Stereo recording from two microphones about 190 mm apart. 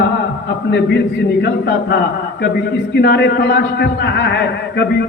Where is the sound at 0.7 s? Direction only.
65° left (ahead or behind).